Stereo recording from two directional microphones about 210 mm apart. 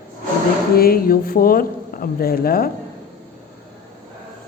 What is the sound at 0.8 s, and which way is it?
A woman's voice, 45° left (ahead or behind).